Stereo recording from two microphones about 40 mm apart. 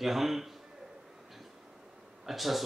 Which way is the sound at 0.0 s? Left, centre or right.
Centre.